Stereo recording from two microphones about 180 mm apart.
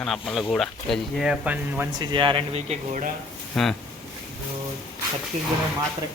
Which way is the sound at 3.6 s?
Centre (ahead or behind).